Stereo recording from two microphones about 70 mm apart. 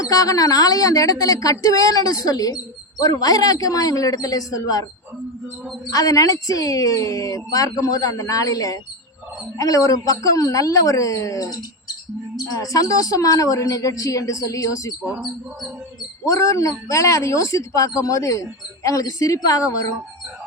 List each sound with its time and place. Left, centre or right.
0.0 s speech: left
5.9 s speech: left
16.2 s speech: left